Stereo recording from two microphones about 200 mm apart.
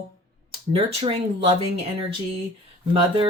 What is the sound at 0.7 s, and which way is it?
Speech, 30° right (ahead or behind).